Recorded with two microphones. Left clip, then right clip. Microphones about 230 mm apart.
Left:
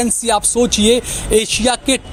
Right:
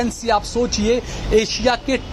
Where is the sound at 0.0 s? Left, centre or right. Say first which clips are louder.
Left 3 dB; left.